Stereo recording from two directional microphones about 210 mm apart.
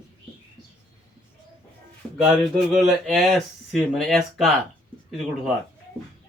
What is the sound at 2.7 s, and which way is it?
Speech, centre (ahead or behind).